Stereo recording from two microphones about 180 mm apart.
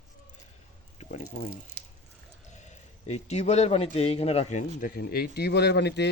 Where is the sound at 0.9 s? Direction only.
35° left (ahead or behind).